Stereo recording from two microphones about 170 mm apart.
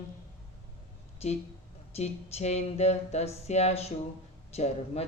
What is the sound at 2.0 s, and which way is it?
Speech, 40° left (ahead or behind).